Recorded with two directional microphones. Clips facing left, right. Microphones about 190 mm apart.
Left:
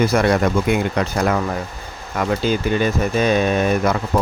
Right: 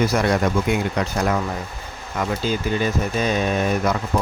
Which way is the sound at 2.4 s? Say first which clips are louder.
Left 3 dB; 65° left (ahead or behind).